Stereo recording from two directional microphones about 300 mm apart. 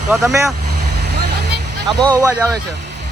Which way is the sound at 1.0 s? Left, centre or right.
Right.